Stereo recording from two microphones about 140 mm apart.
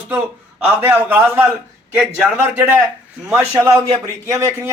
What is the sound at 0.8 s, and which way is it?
A man's voice, 15° right (ahead or behind).